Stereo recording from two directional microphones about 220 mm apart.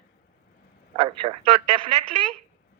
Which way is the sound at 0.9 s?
25° right (ahead or behind).